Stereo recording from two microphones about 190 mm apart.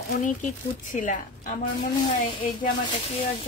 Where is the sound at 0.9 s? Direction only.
45° left (ahead or behind).